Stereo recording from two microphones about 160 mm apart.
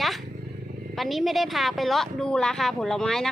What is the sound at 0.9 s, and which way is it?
A woman's voice, centre (ahead or behind).